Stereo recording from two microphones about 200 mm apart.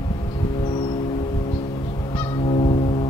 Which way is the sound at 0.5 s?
25° left (ahead or behind).